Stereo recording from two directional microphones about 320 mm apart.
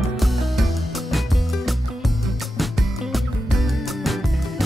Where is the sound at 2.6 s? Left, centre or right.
Centre.